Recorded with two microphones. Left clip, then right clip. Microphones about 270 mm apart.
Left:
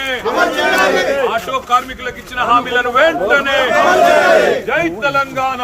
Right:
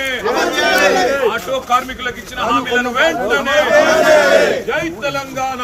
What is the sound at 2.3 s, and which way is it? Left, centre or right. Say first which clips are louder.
A man's voice: left 3 dB; left.